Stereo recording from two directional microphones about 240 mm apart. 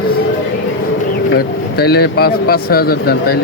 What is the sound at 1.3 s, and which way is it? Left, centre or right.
Speech, left.